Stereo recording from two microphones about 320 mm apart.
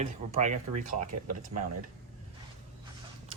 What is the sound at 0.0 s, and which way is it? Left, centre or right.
Speech, right.